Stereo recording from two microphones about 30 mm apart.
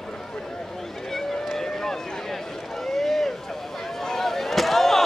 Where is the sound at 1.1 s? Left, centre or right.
Centre.